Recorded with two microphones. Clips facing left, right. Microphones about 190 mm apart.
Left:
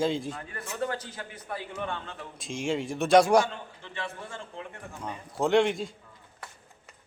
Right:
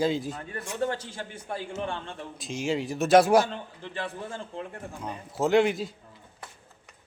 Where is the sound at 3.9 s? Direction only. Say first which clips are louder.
Right 3 dB; 35° right (ahead or behind).